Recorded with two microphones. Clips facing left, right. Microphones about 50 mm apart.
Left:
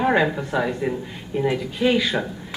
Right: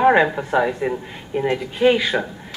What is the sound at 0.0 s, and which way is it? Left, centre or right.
Speech, centre.